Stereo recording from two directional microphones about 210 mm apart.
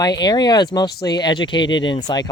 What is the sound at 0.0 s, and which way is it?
Speech, 20° left (ahead or behind).